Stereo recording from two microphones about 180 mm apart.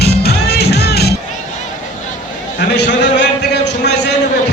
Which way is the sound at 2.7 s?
75° left (ahead or behind).